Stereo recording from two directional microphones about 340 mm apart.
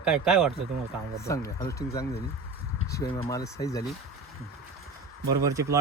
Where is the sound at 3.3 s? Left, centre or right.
Centre.